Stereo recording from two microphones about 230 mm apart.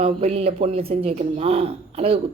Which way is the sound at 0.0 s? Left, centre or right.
Right.